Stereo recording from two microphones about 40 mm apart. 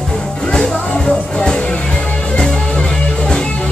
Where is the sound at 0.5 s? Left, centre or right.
Centre.